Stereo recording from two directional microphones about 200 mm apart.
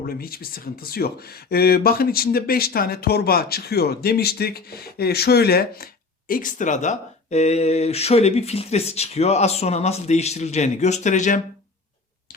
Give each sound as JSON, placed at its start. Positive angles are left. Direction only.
{"t": 0.1, "sound": "speech", "side_deg": 50}